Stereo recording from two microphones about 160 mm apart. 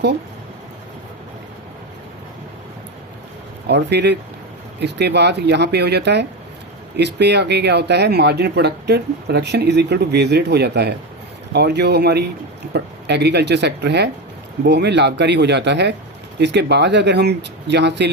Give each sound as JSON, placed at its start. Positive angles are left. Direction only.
{"t": 3.7, "sound": "speech", "side_deg": -90}